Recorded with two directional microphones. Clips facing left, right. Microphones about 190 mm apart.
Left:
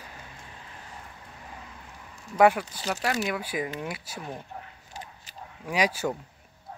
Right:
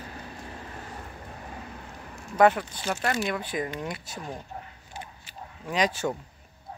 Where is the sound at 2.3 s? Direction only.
10° left (ahead or behind).